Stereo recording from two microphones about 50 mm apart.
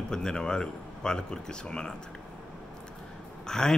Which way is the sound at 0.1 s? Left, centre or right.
Centre.